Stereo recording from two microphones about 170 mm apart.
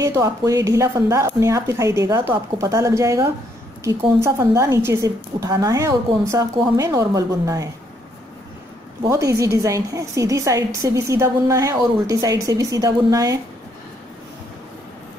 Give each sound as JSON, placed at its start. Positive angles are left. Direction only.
{"t": 0.0, "sound": "a woman's voice", "side_deg": -20}
{"t": 9.4, "sound": "a woman's voice", "side_deg": -20}